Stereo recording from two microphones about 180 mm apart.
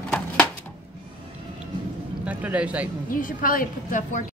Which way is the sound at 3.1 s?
50° left (ahead or behind).